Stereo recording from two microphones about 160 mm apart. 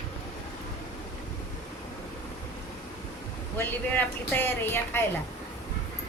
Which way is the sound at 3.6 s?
10° left (ahead or behind).